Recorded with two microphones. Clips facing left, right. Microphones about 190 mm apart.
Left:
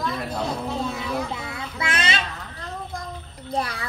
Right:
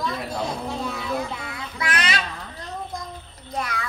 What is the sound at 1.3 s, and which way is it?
Children playing, 25° left (ahead or behind).